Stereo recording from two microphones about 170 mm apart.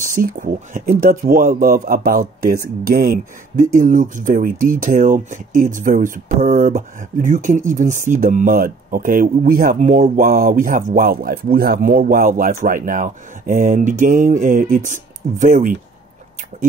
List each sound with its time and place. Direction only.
0.0 s speech: 55° right (ahead or behind)